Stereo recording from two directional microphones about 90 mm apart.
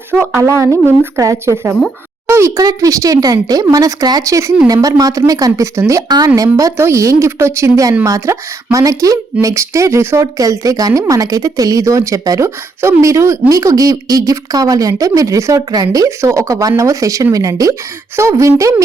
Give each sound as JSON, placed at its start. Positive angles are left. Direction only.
{"t": 0.1, "sound": "speech", "side_deg": -20}
{"t": 0.4, "sound": "speech", "side_deg": -35}